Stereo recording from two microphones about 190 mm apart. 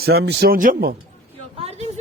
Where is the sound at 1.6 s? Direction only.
35° right (ahead or behind).